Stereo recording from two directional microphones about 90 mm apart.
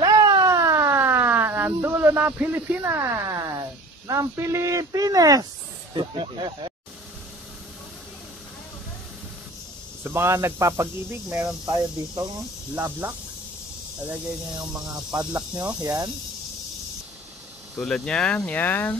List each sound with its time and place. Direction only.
0.0 s a sound: 45° right (ahead or behind); by 2.8 s 20° right (ahead or behind)
2.8 s speech: 30° right (ahead or behind)
5.9 s speech: 65° right (ahead or behind)
10.0 s speech: 30° right (ahead or behind)
11.4 s speech: 40° right (ahead or behind)
12.7 s speech: 20° right (ahead or behind)
15.8 s speech: 40° right (ahead or behind)
17.7 s speech: 5° left (ahead or behind); by 18.9 s 20° left (ahead or behind)